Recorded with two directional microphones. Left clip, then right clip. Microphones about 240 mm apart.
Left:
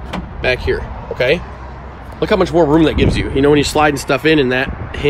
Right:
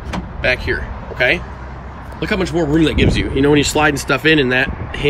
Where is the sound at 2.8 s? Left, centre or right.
Centre.